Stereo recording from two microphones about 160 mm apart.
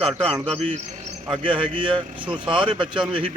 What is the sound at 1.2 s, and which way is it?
Speech, 30° right (ahead or behind).